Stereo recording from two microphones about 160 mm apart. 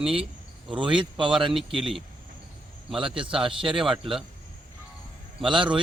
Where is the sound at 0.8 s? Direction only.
30° right (ahead or behind).